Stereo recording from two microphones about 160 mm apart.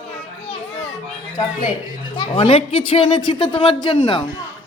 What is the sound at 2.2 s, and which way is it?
A man's voice, 35° left (ahead or behind).